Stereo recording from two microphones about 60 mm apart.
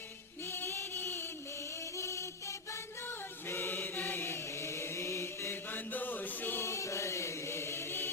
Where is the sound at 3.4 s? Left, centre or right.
Left.